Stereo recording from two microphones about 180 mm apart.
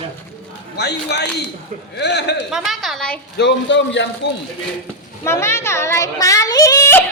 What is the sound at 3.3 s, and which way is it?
Speech, 80° left.